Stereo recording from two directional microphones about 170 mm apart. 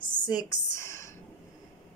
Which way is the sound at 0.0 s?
25° left (ahead or behind).